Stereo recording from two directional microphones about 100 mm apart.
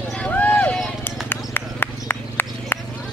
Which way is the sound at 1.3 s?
20° left (ahead or behind).